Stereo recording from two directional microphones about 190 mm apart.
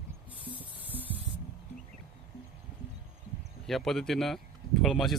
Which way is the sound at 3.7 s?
Centre (ahead or behind).